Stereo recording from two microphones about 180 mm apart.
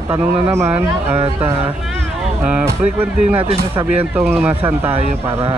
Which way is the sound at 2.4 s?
10° right (ahead or behind).